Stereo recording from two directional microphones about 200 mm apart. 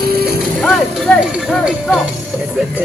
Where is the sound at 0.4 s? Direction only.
Centre (ahead or behind).